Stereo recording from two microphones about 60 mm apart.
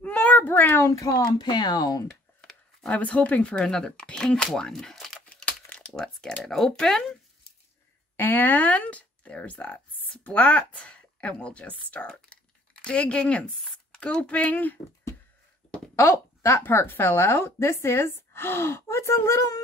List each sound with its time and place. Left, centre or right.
0.0 s cat: left
0.5 s a woman's voice: left
1.2 s speech: left
2.0 s a sound: centre
2.9 s speech: left
3.6 s speech: centre
5.2 s crumpling: left
8.2 s speech: left
16.0 s speech: left
16.8 s a woman's voice: left
17.3 s speech: left